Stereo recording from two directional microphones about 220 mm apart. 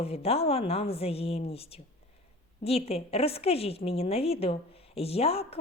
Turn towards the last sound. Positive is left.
turn(degrees=25)  # may be behind; listen again after turning